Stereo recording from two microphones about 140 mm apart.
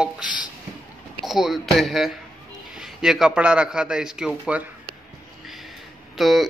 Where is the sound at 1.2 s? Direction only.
Centre (ahead or behind).